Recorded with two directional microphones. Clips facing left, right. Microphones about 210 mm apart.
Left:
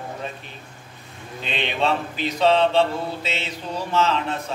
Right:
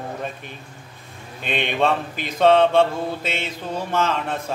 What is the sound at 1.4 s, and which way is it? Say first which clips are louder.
Mantra: right 3 dB; 50° right (ahead or behind).